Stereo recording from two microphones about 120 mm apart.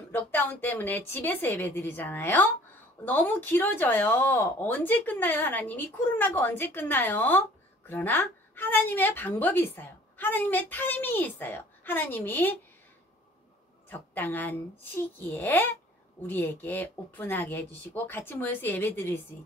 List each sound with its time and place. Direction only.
0.1 s speech: 15° left (ahead or behind)
13.8 s speech: 15° left (ahead or behind)